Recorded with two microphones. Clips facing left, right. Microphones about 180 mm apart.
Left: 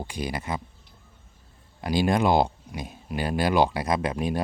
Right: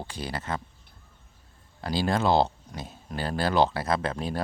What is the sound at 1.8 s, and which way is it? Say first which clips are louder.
Speech: left 3 dB; 15° left (ahead or behind).